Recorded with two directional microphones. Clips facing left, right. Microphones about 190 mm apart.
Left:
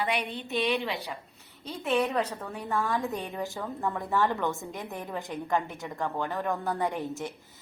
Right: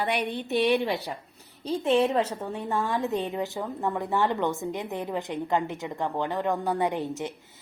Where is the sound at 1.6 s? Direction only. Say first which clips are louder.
Right 5 dB; 30° right (ahead or behind).